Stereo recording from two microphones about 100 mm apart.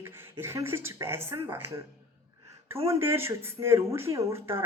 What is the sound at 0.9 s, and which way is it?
Speech, 25° right (ahead or behind).